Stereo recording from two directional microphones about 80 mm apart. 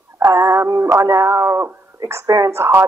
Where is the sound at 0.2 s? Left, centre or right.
Right.